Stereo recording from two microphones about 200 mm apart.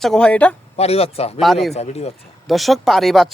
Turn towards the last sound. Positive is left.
turn(degrees=0)  # may be behind; listen again after turning